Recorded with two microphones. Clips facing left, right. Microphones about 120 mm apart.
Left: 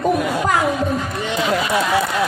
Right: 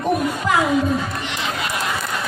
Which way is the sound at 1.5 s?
80° left.